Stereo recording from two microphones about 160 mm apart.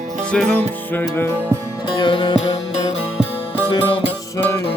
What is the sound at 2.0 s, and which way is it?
Music, 30° left (ahead or behind).